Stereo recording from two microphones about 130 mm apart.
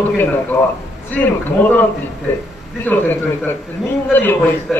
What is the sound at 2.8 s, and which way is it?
A man's voice, 15° left (ahead or behind).